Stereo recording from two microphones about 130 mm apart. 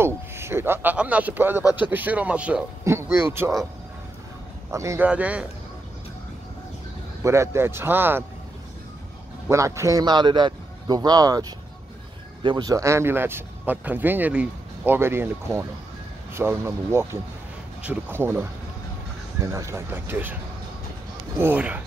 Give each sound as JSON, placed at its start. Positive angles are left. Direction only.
{"t": 0.0, "sound": "a sound", "side_deg": -20}
{"t": 1.8, "sound": "speech", "side_deg": -15}
{"t": 2.8, "sound": "a man's voice", "side_deg": -20}
{"t": 4.6, "sound": "a man's voice", "side_deg": -20}
{"t": 5.0, "sound": "speech", "side_deg": -10}
{"t": 7.2, "sound": "speech", "side_deg": -20}
{"t": 9.5, "sound": "a man's voice", "side_deg": -25}
{"t": 21.4, "sound": "speech", "side_deg": -15}